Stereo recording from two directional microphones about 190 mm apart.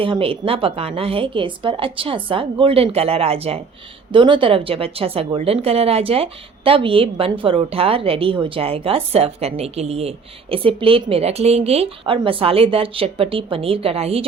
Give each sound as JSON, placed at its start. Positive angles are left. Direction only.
{"t": 0.0, "sound": "a woman's voice", "side_deg": -30}